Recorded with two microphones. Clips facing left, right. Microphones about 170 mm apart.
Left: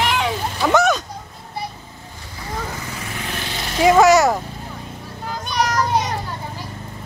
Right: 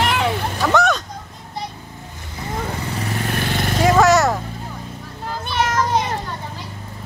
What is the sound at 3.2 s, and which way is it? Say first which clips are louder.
Vehicle: right 6 dB; 50° right (ahead or behind).